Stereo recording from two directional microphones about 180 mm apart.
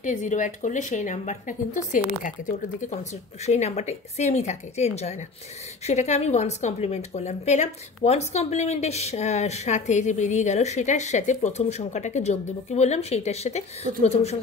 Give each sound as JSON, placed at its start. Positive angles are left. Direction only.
{"t": 0.0, "sound": "a woman's voice", "side_deg": 45}